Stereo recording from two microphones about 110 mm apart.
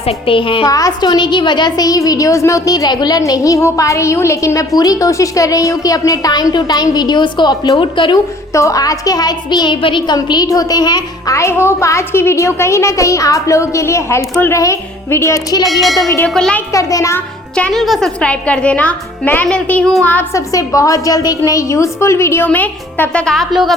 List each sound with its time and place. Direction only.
0.0 s a woman's voice: 60° left (ahead or behind)
0.6 s a woman's voice: 35° left (ahead or behind)
8.5 s a woman's voice: 30° left (ahead or behind)
15.6 s music: centre (ahead or behind)
16.0 s a woman's voice: 30° left (ahead or behind)
16.3 s music: 5° left (ahead or behind)
16.7 s a woman's voice: 30° left (ahead or behind)
17.5 s speech: 5° left (ahead or behind)
20.3 s a woman's voice: 30° left (ahead or behind); by 23.7 s centre (ahead or behind)